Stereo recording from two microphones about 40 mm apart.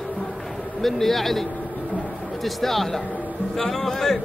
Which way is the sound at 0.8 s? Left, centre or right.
Centre.